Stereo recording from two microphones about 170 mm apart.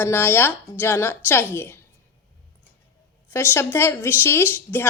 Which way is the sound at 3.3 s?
15° left (ahead or behind).